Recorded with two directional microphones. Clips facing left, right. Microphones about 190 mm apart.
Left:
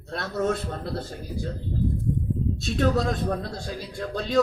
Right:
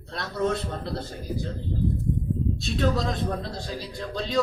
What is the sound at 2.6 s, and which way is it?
A man's voice, 50° left (ahead or behind).